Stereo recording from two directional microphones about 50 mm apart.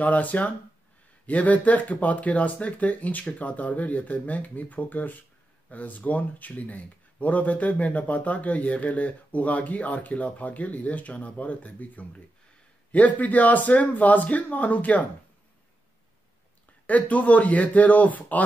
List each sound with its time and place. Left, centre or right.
0.0 s speech: left
16.8 s speech: left